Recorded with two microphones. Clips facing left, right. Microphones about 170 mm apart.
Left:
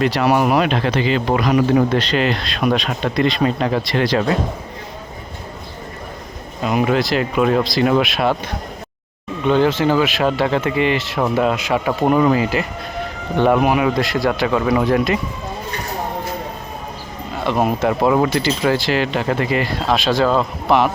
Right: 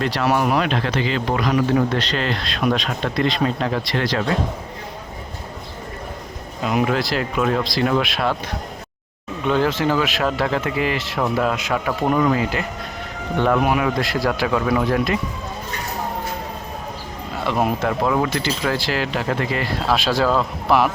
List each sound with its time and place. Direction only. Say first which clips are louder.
0.0 s speech: left 4 dB; 5° left (ahead or behind)
6.7 s speech: left 3 dB; 5° left (ahead or behind)
9.5 s speech: left 4 dB; centre (ahead or behind)
11.9 s speech: left 4 dB; 15° left (ahead or behind)
17.4 s speech: left 3 dB; 5° left (ahead or behind)